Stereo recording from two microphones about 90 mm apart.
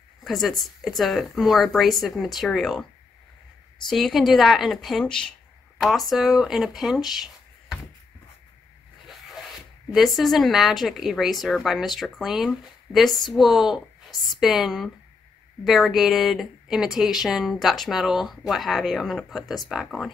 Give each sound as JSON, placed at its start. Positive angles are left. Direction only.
{"t": 0.2, "sound": "a woman's voice", "side_deg": 0}
{"t": 3.9, "sound": "a woman's voice", "side_deg": 0}
{"t": 9.8, "sound": "a woman's voice", "side_deg": 0}